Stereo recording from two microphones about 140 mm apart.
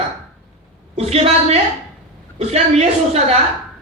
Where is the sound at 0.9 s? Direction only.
45° right (ahead or behind).